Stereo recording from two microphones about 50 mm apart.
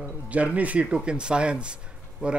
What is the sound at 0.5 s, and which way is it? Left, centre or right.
Speech, right.